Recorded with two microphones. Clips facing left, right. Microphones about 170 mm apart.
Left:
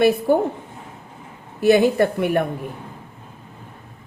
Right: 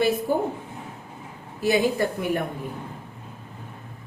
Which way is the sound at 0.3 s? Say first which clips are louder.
Left 6 dB; 70° left (ahead or behind).